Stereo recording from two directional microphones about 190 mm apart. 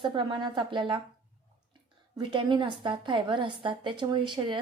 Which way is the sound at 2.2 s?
25° right (ahead or behind).